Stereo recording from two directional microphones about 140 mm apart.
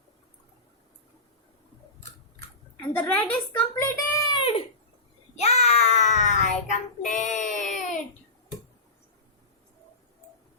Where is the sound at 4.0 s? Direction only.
25° left (ahead or behind).